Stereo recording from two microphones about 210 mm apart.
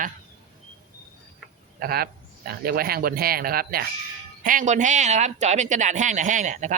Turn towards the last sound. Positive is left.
turn(degrees=-35)  # may be behind; listen again after turning